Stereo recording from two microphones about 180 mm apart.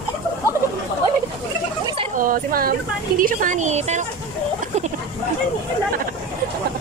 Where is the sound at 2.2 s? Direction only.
50° right (ahead or behind).